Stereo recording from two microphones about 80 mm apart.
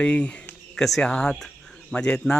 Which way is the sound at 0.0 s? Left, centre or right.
Centre.